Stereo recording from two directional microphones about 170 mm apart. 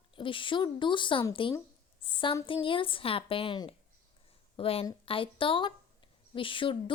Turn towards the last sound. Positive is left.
turn(degrees=30)  # may be behind; listen again after turning